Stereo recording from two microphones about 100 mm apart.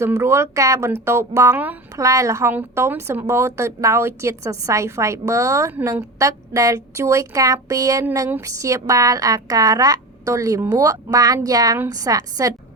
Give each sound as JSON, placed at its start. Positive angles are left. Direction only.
{"t": 0.0, "sound": "a woman's voice", "side_deg": -25}